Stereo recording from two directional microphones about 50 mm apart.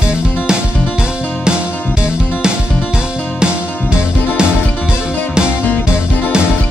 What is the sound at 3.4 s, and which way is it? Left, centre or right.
Music, centre.